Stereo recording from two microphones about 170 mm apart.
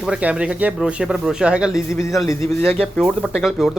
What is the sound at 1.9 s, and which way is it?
Speech, 15° left (ahead or behind).